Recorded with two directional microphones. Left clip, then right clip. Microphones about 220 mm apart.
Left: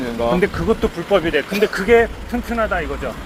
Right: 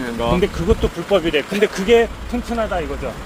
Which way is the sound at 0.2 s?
20° right (ahead or behind).